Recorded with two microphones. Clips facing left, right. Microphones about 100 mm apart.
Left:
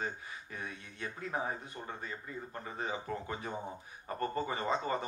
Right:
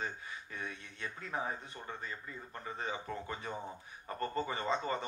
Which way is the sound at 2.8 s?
30° left (ahead or behind).